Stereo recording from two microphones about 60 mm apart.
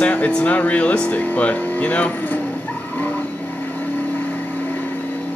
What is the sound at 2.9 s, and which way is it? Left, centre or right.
Vehicle, left.